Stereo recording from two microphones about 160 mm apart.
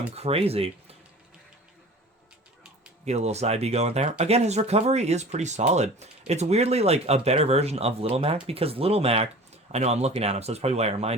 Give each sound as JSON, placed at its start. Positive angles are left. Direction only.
{"t": 0.2, "sound": "speech", "side_deg": -40}
{"t": 3.1, "sound": "speech", "side_deg": -45}